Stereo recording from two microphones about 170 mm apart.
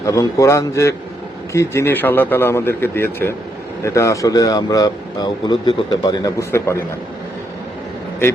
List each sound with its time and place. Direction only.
0.0 s a man's voice: 20° left (ahead or behind)